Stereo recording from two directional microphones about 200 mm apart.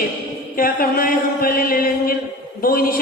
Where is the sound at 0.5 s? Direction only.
45° left (ahead or behind).